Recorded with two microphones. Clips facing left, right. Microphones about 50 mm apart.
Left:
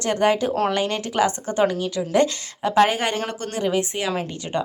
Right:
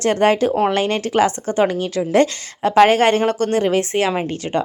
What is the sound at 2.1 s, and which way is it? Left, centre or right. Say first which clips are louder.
A woman's voice: right 3 dB; right.